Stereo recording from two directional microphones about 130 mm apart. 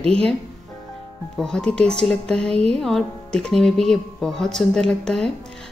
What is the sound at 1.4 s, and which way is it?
A woman's voice, 5° left (ahead or behind).